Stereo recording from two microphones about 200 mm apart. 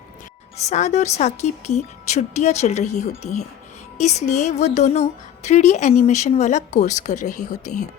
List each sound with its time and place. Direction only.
0.5 s speech: 35° left (ahead or behind)